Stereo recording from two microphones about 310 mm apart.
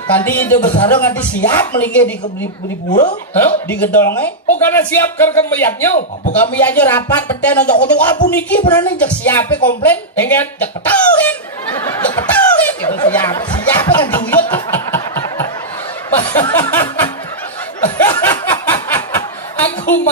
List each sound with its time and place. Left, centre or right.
0.1 s speech: centre
2.9 s speech: left
3.3 s speech: centre
14.4 s a sound: centre
16.3 s speech: centre
17.9 s a sound: centre